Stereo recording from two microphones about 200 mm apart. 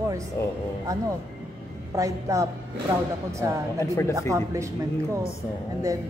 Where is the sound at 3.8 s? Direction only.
15° left (ahead or behind).